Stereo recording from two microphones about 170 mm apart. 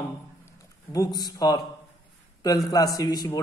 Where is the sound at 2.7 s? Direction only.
20° left (ahead or behind).